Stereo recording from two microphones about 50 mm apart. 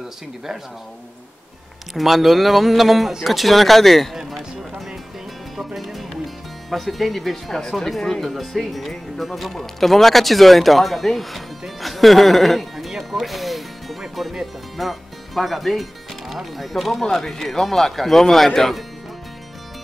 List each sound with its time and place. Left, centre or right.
2.0 s a man's voice: centre
5.8 s music: centre
7.7 s a man's voice: centre